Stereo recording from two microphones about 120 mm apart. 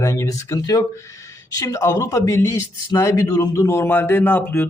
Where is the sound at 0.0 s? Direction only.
25° left (ahead or behind).